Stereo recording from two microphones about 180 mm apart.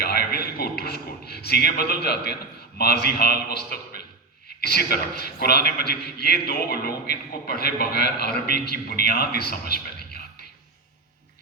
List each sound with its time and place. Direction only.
0.0 s a man's voice: 60° left (ahead or behind)